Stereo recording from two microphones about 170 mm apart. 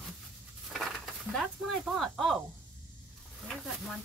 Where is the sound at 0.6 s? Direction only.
Centre (ahead or behind).